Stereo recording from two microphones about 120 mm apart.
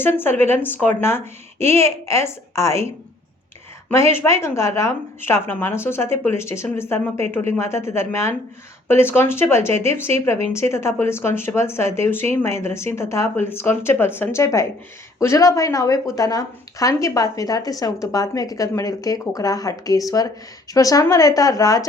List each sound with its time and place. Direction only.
0.0 s speech: 20° left (ahead or behind)
3.9 s speech: 20° left (ahead or behind)